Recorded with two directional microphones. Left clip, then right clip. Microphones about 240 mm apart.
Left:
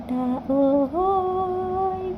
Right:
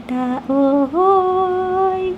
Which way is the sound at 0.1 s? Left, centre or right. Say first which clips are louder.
Right 5 dB; right.